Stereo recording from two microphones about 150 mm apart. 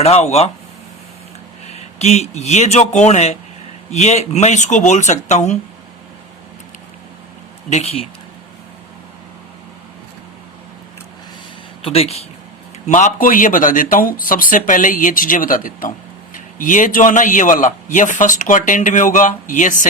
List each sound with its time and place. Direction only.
0.0 s speech: 45° left (ahead or behind)
1.6 s speech: 45° left (ahead or behind)
7.7 s speech: 45° left (ahead or behind)
11.8 s speech: 40° left (ahead or behind)
12.9 s a man's voice: 60° left (ahead or behind)